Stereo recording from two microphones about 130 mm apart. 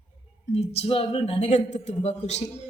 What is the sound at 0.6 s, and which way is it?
Speech, 50° left (ahead or behind).